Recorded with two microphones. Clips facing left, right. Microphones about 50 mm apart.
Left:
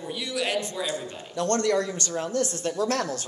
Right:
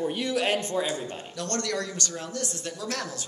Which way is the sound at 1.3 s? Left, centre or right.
Left.